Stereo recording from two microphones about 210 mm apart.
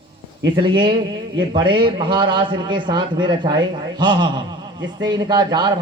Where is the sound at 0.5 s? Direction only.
20° right (ahead or behind).